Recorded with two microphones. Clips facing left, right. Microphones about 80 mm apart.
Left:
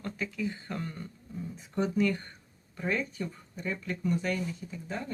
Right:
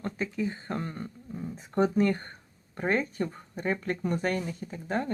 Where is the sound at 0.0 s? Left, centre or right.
Right.